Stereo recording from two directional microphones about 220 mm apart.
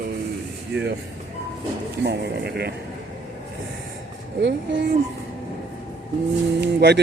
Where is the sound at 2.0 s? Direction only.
50° right (ahead or behind).